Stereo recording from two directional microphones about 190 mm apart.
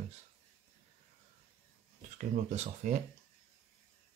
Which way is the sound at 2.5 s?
35° right (ahead or behind).